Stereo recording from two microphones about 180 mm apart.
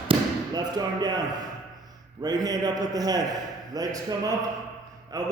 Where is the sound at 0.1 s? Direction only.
20° right (ahead or behind).